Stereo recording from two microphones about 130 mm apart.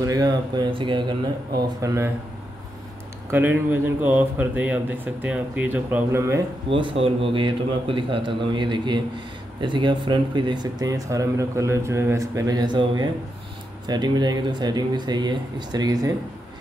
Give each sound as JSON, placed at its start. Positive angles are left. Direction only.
{"t": 0.0, "sound": "a man's voice", "side_deg": -30}
{"t": 1.8, "sound": "speech", "side_deg": -25}
{"t": 3.3, "sound": "speech", "side_deg": -15}
{"t": 6.7, "sound": "a man's voice", "side_deg": -40}